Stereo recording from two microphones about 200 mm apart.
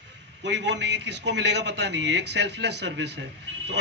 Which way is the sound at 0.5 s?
60° right (ahead or behind).